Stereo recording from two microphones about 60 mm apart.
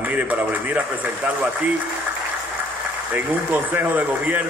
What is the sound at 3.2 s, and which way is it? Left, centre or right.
A man's voice, right.